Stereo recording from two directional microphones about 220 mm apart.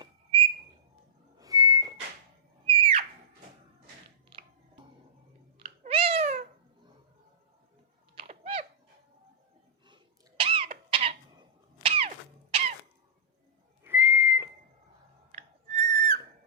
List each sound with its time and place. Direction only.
1.4 s whistling: 15° right (ahead or behind)
2.6 s screaming: 25° right (ahead or behind)
4.3 s a sound: 25° right (ahead or behind)
5.5 s cat: 25° right (ahead or behind)
8.1 s a sound: 25° right (ahead or behind)
9.8 s cough: 20° right (ahead or behind)
11.8 s a sound: 25° right (ahead or behind)
13.8 s whistling: 10° right (ahead or behind)
15.3 s music: 30° right (ahead or behind)